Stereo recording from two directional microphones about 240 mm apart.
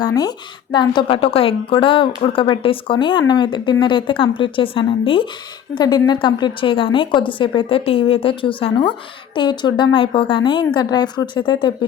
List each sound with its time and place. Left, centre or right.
0.0 s a woman's voice: centre